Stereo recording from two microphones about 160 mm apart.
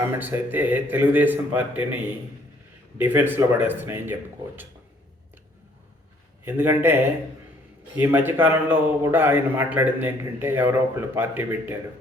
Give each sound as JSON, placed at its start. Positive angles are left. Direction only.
{"t": 0.2, "sound": "a man's voice", "side_deg": -10}
{"t": 3.0, "sound": "a man's voice", "side_deg": -10}
{"t": 6.4, "sound": "a man's voice", "side_deg": -15}